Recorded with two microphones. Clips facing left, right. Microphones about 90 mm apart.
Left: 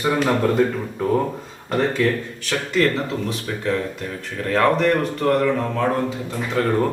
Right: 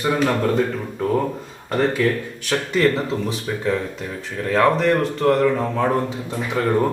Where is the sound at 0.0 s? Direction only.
5° left (ahead or behind).